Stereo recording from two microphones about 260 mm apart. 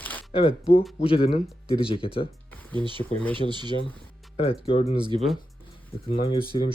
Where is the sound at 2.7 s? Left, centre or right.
Centre.